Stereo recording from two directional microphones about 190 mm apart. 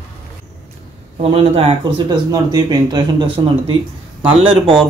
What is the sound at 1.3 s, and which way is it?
Speech, 30° right (ahead or behind).